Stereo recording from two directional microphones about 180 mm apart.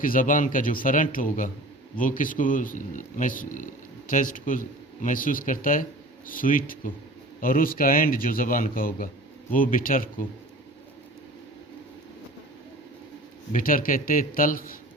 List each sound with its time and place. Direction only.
0.0 s speech: 50° left (ahead or behind)
13.5 s speech: 50° left (ahead or behind)